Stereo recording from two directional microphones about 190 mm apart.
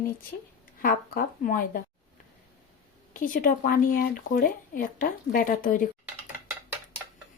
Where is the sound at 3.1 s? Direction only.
45° left (ahead or behind).